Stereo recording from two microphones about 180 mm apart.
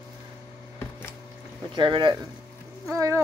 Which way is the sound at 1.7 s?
25° right (ahead or behind).